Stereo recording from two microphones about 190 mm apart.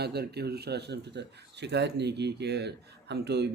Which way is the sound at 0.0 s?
55° right (ahead or behind).